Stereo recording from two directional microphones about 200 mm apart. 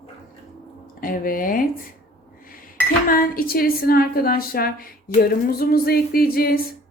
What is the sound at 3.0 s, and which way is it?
A woman's voice, 45° left (ahead or behind).